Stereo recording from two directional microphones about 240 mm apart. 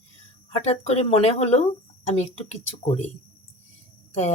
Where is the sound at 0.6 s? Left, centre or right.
Left.